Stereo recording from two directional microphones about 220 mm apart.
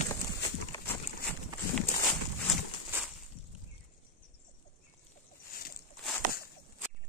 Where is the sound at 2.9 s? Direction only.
10° right (ahead or behind).